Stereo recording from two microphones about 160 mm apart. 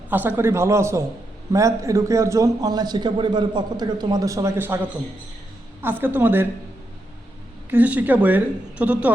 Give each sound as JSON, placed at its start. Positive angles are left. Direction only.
{"t": 0.1, "sound": "a woman's voice", "side_deg": -10}
{"t": 7.7, "sound": "a woman's voice", "side_deg": -10}